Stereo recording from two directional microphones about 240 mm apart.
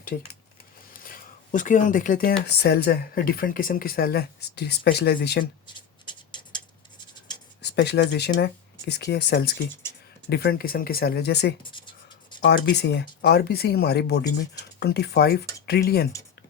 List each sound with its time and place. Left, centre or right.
1.0 s speech: left
5.6 s a sound: centre
7.6 s speech: left
11.6 s writing: centre
12.4 s speech: left